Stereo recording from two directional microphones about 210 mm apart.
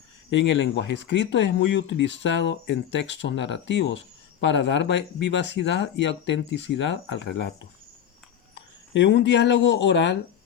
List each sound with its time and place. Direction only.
0.3 s speech: 60° left (ahead or behind)